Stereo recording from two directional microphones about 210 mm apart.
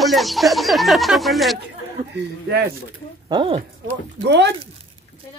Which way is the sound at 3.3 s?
25° right (ahead or behind).